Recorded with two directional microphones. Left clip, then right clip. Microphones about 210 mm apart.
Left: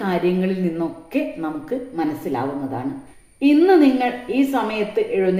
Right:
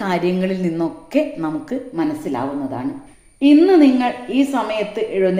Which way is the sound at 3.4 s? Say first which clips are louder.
Right 2 dB; 35° right (ahead or behind).